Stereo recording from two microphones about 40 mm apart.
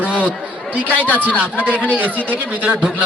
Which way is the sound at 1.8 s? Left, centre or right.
Right.